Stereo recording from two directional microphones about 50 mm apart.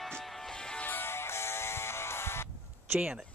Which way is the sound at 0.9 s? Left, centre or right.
Left.